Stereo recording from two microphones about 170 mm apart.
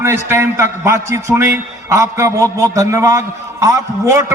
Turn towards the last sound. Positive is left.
turn(degrees=-15)  # may be behind; listen again after turning